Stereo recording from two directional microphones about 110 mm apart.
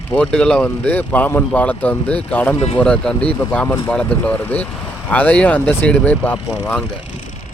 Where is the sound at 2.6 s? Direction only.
70° left (ahead or behind).